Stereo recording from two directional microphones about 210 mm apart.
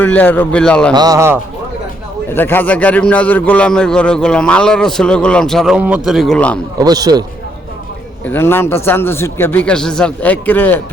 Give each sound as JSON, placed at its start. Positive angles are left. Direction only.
{"t": 0.0, "sound": "speech", "side_deg": 10}
{"t": 0.9, "sound": "a man's voice", "side_deg": -15}
{"t": 2.3, "sound": "a man's voice", "side_deg": 10}
{"t": 6.7, "sound": "a man's voice", "side_deg": -15}
{"t": 8.3, "sound": "speech", "side_deg": 10}